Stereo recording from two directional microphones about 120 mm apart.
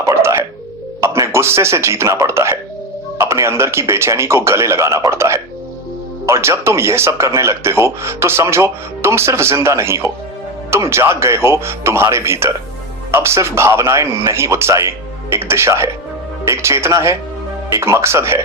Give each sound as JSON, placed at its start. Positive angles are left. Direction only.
{"t": 0.0, "sound": "music", "side_deg": -25}
{"t": 1.0, "sound": "speech", "side_deg": -25}